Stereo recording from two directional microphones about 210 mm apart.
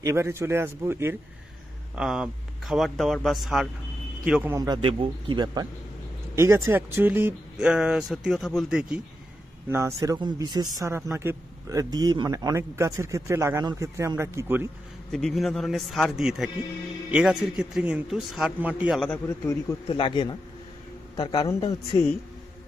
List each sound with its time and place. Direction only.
0.0 s a man's voice: 15° right (ahead or behind)
15.0 s speech: centre (ahead or behind)
19.9 s speech: 25° left (ahead or behind)